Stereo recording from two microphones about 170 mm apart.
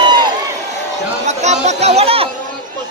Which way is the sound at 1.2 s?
40° right (ahead or behind).